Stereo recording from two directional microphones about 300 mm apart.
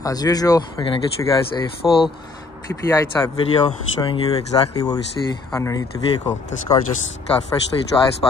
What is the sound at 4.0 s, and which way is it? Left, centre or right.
Speech, centre.